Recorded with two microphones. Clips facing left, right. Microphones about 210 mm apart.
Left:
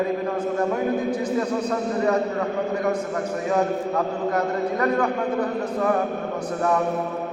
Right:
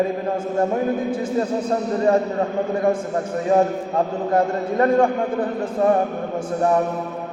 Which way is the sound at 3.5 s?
30° right (ahead or behind).